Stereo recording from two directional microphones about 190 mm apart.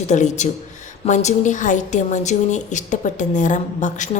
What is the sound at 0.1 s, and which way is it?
A woman's voice, 40° left (ahead or behind).